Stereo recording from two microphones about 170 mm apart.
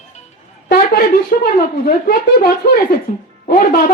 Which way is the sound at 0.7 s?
60° left (ahead or behind).